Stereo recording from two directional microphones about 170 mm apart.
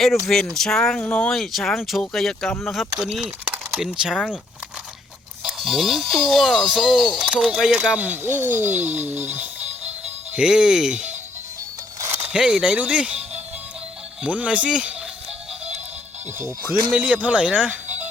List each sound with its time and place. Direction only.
0.0 s speech: centre (ahead or behind)
5.4 s speech: centre (ahead or behind)
9.6 s music: 40° right (ahead or behind)
10.3 s speech: 5° right (ahead or behind)
14.2 s speech: 10° right (ahead or behind)
16.9 s speech: 10° right (ahead or behind)